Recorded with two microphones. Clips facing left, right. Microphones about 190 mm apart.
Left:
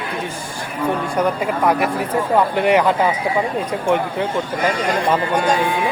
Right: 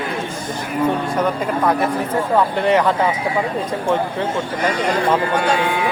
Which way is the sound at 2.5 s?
15° left (ahead or behind).